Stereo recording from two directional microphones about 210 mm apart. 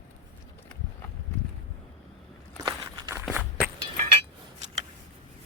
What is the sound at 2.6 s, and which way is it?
Walk, 15° right (ahead or behind).